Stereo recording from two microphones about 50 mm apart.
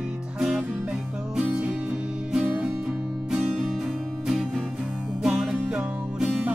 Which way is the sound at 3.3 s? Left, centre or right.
Centre.